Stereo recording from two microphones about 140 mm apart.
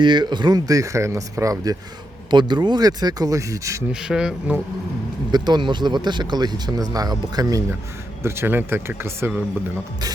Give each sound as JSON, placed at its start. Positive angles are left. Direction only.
{"t": 0.0, "sound": "speech", "side_deg": -35}
{"t": 2.3, "sound": "speech", "side_deg": -30}
{"t": 4.0, "sound": "a man's voice", "side_deg": -5}
{"t": 5.3, "sound": "speech", "side_deg": -30}